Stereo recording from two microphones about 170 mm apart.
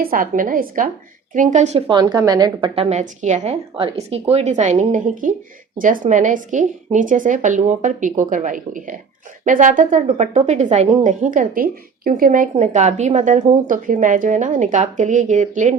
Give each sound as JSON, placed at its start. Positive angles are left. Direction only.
{"t": 0.0, "sound": "a woman's voice", "side_deg": -55}
{"t": 1.9, "sound": "a woman's voice", "side_deg": -25}
{"t": 3.0, "sound": "speech", "side_deg": -45}